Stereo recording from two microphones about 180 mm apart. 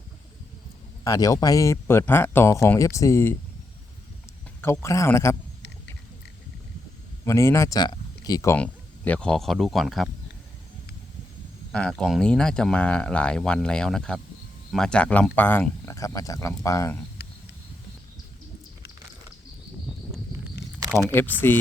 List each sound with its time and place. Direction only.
1.0 s speech: 20° left (ahead or behind)
4.6 s speech: 15° left (ahead or behind)
7.3 s speech: 15° left (ahead or behind)
8.5 s speech: 5° left (ahead or behind)
11.7 s speech: 5° left (ahead or behind)
21.4 s speech: 10° left (ahead or behind)